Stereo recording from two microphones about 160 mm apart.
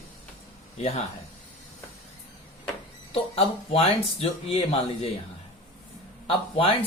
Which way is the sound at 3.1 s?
40° left (ahead or behind).